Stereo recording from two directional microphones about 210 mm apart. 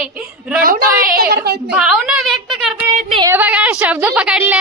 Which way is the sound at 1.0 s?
45° right (ahead or behind).